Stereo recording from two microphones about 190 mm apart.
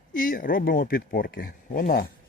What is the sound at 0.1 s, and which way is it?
Speech, 45° left (ahead or behind).